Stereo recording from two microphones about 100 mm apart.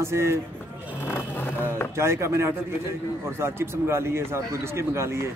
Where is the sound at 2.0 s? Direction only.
25° right (ahead or behind).